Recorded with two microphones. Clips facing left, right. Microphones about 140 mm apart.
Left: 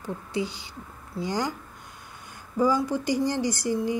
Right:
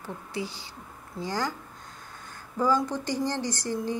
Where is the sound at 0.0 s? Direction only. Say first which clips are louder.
Left 4 dB; 20° left (ahead or behind).